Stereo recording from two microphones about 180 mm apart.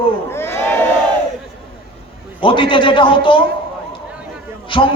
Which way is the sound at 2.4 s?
30° left (ahead or behind).